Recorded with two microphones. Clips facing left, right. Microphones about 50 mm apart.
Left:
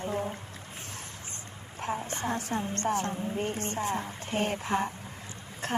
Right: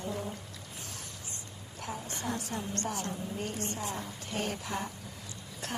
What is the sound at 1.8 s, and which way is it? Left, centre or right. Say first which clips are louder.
Speech: left 5 dB; left.